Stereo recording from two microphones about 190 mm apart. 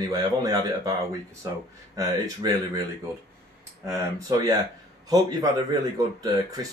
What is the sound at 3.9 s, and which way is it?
Speech, 15° right (ahead or behind).